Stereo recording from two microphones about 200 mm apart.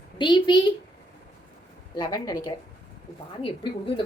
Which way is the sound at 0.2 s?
20° left (ahead or behind).